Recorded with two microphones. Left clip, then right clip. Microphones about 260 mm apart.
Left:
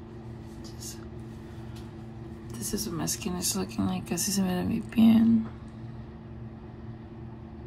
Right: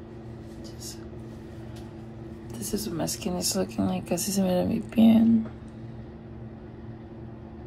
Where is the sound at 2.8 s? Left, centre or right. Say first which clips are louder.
Right 3 dB; centre.